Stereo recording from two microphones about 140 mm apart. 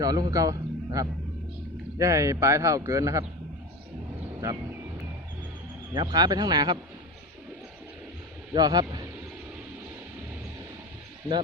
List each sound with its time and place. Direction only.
0.0 s a man's voice: 25° right (ahead or behind)
5.9 s speech: 35° right (ahead or behind)
8.5 s a man's voice: 30° right (ahead or behind)